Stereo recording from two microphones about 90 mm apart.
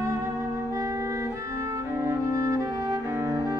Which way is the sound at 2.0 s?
35° right (ahead or behind).